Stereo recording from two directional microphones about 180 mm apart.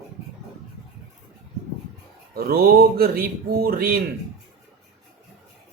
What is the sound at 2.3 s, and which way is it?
Speech, 55° right (ahead or behind).